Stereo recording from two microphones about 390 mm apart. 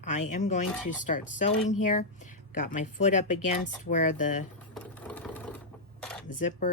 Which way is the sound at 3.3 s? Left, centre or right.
Left.